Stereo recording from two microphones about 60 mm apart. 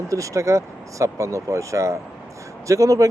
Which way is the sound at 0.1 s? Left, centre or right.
Right.